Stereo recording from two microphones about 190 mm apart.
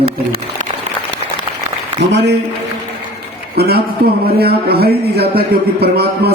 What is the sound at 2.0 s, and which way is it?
Speech, 65° right (ahead or behind).